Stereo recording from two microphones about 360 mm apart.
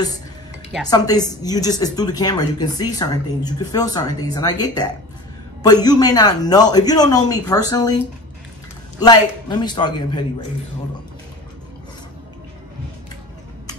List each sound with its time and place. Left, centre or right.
0.8 s a woman's voice: centre
9.0 s a woman's voice: centre